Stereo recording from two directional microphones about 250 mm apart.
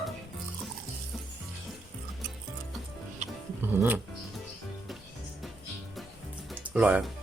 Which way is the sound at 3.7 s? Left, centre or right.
Centre.